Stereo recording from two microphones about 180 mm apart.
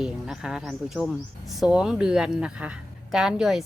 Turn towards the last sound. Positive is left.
turn(degrees=-5)  # may be behind; listen again after turning